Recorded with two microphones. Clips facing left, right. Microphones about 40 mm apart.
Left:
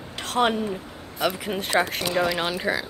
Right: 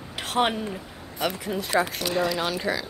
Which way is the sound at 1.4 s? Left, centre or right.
Left.